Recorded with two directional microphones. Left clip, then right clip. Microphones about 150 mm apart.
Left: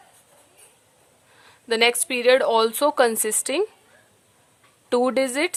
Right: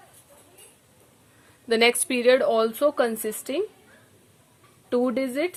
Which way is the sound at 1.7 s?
20° left (ahead or behind).